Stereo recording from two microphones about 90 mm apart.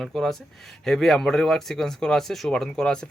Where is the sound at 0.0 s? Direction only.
5° left (ahead or behind).